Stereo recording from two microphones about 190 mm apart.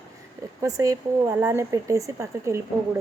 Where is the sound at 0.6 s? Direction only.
15° right (ahead or behind).